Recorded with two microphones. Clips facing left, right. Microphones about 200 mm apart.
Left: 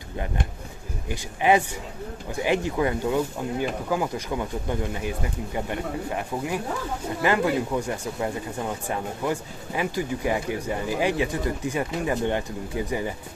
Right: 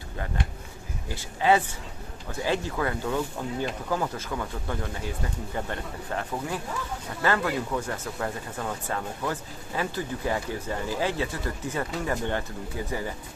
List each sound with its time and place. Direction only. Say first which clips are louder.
1.0 s speech: left 2 dB; 15° left (ahead or behind)